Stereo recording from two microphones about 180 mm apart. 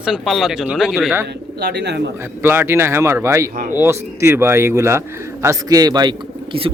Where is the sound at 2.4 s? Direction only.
10° right (ahead or behind).